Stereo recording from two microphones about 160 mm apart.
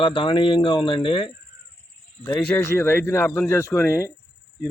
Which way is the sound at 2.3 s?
10° left (ahead or behind).